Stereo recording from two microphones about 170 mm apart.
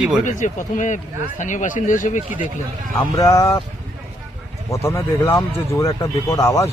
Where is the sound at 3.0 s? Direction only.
20° left (ahead or behind).